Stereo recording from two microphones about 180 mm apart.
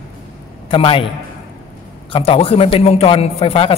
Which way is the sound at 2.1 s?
30° left (ahead or behind).